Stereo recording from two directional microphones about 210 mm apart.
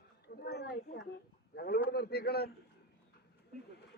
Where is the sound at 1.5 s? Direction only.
50° left (ahead or behind).